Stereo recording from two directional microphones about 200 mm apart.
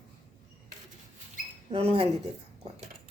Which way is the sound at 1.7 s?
30° right (ahead or behind).